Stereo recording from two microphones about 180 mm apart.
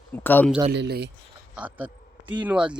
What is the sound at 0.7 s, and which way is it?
Speech, 65° right (ahead or behind).